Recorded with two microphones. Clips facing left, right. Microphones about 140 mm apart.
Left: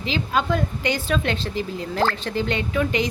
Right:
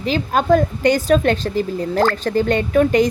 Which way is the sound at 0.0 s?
45° right (ahead or behind).